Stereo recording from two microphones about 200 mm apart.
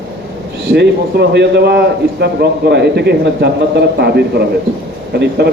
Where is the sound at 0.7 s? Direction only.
55° right (ahead or behind).